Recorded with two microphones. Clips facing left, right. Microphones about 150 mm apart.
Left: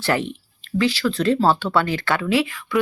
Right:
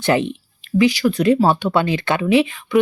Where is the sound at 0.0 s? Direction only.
20° right (ahead or behind).